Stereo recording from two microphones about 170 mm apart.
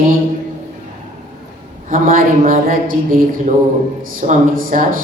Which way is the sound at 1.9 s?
55° right (ahead or behind).